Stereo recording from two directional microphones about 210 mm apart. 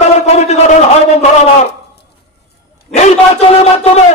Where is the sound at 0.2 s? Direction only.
30° left (ahead or behind).